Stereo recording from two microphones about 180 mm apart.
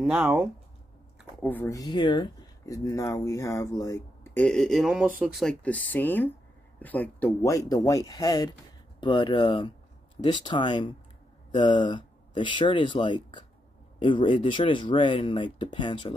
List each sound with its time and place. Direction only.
0.0 s speech: 10° right (ahead or behind)
1.4 s speech: 10° left (ahead or behind); by 16.2 s 25° left (ahead or behind)